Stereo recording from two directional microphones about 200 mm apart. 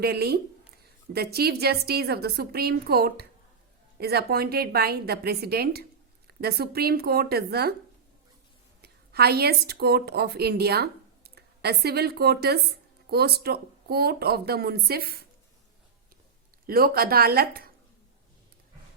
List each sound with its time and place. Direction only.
0.0 s speech: 50° right (ahead or behind)
8.8 s a woman's voice: 50° right (ahead or behind)
16.6 s speech: 50° right (ahead or behind)